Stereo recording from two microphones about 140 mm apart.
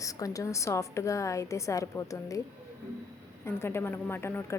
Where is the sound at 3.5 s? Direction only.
15° left (ahead or behind).